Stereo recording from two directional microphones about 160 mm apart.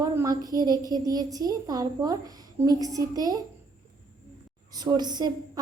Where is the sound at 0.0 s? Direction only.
25° right (ahead or behind).